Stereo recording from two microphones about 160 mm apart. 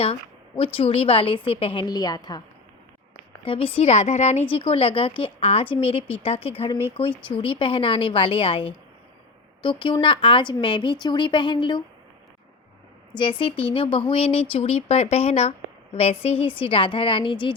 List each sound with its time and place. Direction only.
0.0 s a woman's voice: 35° left (ahead or behind)
3.4 s a woman's voice: 35° left (ahead or behind)
13.1 s a woman's voice: 30° left (ahead or behind)